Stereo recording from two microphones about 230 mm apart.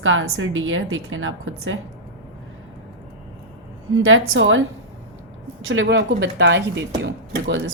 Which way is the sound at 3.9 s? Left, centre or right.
Right.